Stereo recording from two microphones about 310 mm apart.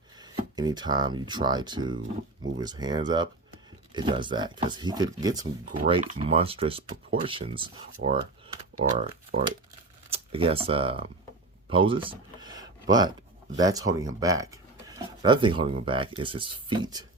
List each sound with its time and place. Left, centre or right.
0.2 s speech: centre
8.8 s speech: centre
11.7 s a sound: centre
13.6 s speech: centre